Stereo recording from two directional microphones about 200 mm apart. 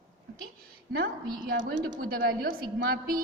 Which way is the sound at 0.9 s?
50° right (ahead or behind).